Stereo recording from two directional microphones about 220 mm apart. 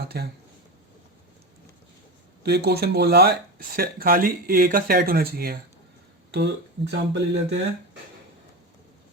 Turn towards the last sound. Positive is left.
turn(degrees=-50)  # may be behind; listen again after turning